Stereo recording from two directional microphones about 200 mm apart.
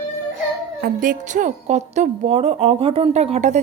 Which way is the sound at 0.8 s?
40° right (ahead or behind).